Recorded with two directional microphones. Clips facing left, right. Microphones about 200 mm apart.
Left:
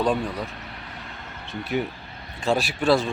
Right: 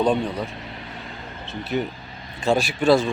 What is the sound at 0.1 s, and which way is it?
Speech, centre (ahead or behind).